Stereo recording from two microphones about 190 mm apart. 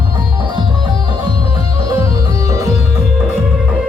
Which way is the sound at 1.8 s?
15° right (ahead or behind).